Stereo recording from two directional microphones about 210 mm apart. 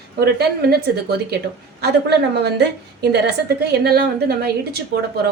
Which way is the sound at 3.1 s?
50° right (ahead or behind).